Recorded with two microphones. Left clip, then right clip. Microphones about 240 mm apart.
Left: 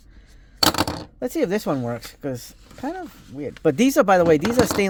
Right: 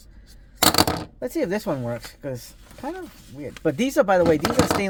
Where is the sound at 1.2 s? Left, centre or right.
Left.